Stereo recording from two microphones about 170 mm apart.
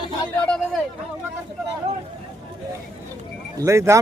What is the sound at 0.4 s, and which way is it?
Speech, 5° left (ahead or behind).